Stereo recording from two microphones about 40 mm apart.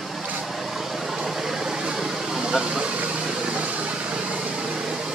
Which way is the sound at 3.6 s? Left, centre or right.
Right.